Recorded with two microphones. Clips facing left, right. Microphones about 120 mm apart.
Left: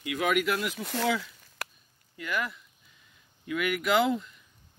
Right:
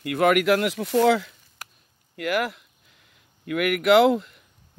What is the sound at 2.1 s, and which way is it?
Speech, 85° right.